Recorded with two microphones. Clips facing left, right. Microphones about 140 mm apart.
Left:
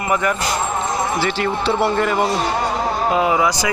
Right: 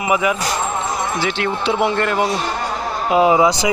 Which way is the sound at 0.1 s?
5° right (ahead or behind).